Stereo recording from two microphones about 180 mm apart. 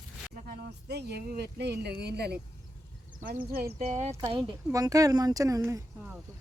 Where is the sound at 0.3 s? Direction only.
55° right (ahead or behind).